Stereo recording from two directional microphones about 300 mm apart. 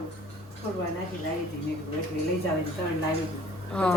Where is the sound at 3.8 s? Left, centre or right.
Centre.